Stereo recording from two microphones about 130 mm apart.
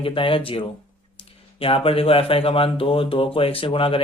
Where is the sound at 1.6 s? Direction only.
45° left (ahead or behind).